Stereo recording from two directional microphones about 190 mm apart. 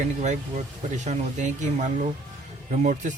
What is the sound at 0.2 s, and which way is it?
Speech, 35° right (ahead or behind).